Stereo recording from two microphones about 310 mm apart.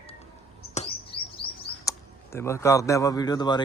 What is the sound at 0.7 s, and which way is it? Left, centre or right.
Speech, centre.